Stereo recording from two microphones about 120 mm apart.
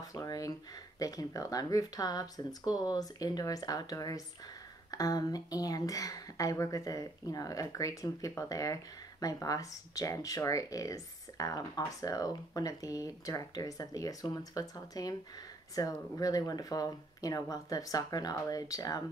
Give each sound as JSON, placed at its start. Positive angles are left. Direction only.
{"t": 0.0, "sound": "speech", "side_deg": 30}